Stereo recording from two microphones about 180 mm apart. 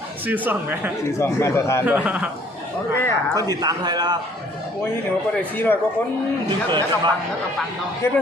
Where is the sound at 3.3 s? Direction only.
20° right (ahead or behind).